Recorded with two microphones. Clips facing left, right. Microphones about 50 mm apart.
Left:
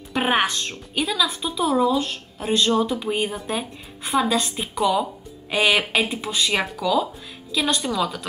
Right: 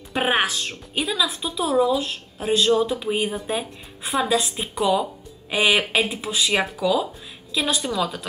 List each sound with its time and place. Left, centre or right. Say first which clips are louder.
0.1 s speech: left 1 dB; centre